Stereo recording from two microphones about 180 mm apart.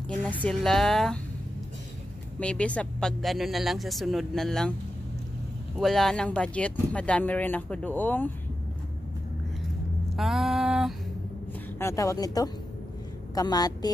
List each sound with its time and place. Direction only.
0.3 s speech: 5° left (ahead or behind)
2.4 s speech: 5° left (ahead or behind)
5.8 s speech: centre (ahead or behind)
10.1 s a sound: centre (ahead or behind)
11.8 s a woman's voice: 15° left (ahead or behind)